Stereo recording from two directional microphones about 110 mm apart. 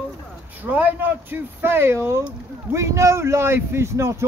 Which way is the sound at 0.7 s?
15° right (ahead or behind).